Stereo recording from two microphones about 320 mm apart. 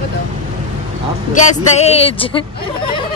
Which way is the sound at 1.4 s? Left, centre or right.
Centre.